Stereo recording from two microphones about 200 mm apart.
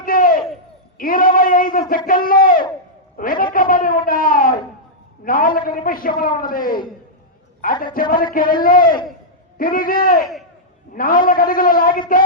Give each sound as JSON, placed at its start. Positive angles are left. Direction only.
{"t": 0.0, "sound": "crowd", "side_deg": 45}
{"t": 0.9, "sound": "a man's voice", "side_deg": 45}